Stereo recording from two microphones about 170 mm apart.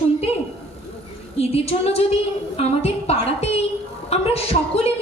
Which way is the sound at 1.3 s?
35° left (ahead or behind).